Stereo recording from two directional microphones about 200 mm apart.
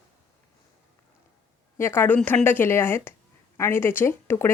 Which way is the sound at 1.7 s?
10° left (ahead or behind).